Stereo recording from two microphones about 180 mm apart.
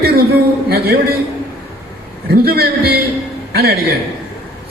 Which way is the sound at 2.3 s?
55° right (ahead or behind).